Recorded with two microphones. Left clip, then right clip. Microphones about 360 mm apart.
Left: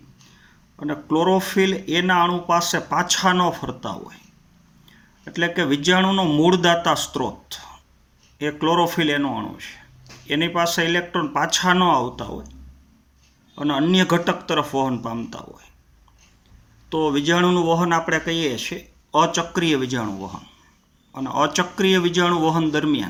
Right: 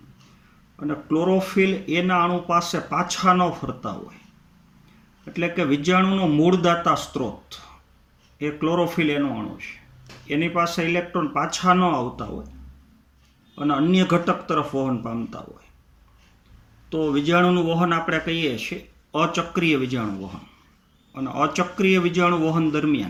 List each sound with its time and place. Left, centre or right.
0.9 s speech: left
5.3 s speech: centre
13.6 s speech: left
16.9 s speech: left
21.1 s speech: centre